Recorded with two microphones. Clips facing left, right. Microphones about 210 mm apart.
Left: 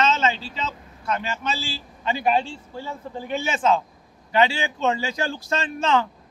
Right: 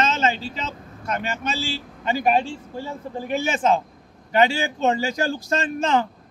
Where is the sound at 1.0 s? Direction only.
50° right (ahead or behind).